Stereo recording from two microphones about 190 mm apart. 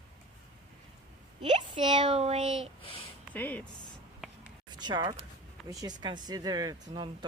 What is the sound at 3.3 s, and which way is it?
Speech, 10° left (ahead or behind).